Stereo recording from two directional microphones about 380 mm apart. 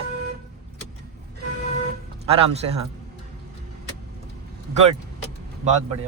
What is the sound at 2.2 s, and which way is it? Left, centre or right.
Speech, centre.